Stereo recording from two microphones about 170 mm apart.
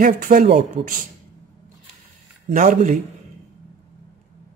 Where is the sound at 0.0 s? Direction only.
55° right (ahead or behind).